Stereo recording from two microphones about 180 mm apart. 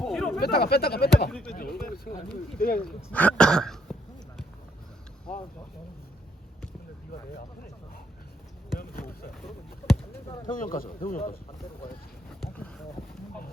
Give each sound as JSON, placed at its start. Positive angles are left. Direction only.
{"t": 0.0, "sound": "a sound", "side_deg": 0}
{"t": 0.3, "sound": "speech", "side_deg": 60}
{"t": 1.3, "sound": "speech", "side_deg": 5}
{"t": 1.5, "sound": "speech", "side_deg": 55}
{"t": 2.7, "sound": "speech", "side_deg": 5}
{"t": 5.3, "sound": "speech", "side_deg": 5}
{"t": 7.1, "sound": "speech", "side_deg": 55}
{"t": 8.8, "sound": "a sound", "side_deg": 55}
{"t": 9.4, "sound": "a sound", "side_deg": 0}
{"t": 10.2, "sound": "speech", "side_deg": 20}
{"t": 10.5, "sound": "speech", "side_deg": 50}
{"t": 12.3, "sound": "a sound", "side_deg": 5}